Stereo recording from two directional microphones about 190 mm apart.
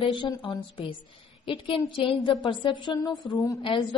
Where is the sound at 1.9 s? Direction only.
25° left (ahead or behind).